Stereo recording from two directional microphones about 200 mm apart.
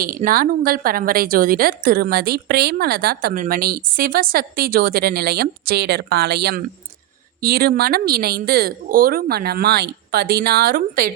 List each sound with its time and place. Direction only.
0.3 s a woman's voice: 45° right (ahead or behind)